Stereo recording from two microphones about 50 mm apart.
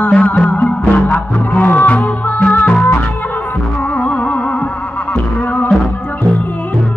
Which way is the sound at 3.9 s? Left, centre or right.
Left.